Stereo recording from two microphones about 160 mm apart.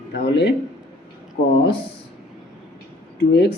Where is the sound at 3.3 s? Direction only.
90° left.